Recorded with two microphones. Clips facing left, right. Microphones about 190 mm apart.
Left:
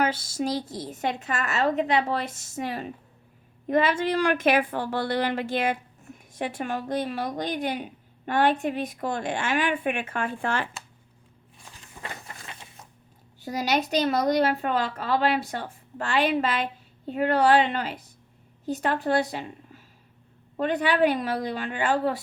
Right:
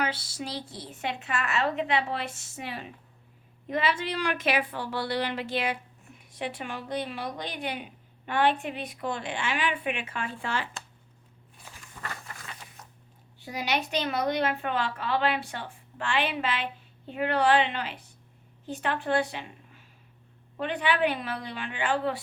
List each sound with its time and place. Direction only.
0.0 s speech: 45° left (ahead or behind)
12.0 s a sound: 25° left (ahead or behind)
13.4 s a woman's voice: 40° left (ahead or behind)